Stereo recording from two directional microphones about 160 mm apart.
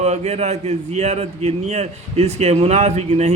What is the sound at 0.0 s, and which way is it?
A man's voice, 45° right (ahead or behind).